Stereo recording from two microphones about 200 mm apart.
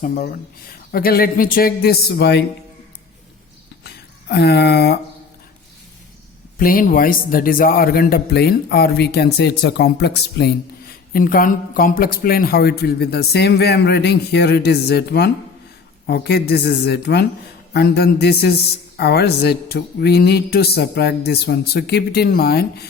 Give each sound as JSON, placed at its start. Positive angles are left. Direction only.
{"t": 0.0, "sound": "a man's voice", "side_deg": 45}
{"t": 3.8, "sound": "music", "side_deg": 55}
{"t": 6.6, "sound": "a man's voice", "side_deg": 45}